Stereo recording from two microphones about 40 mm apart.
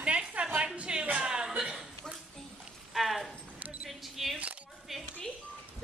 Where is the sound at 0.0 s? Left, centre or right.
Right.